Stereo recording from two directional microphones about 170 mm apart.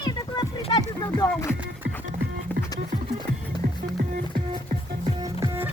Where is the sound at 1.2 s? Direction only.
20° left (ahead or behind).